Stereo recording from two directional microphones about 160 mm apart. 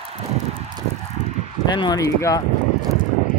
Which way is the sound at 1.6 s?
25° left (ahead or behind).